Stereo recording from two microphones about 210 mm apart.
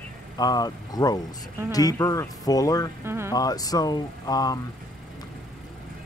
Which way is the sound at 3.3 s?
15° left (ahead or behind).